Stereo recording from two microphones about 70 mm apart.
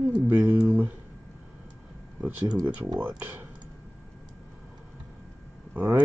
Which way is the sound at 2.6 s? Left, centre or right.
Right.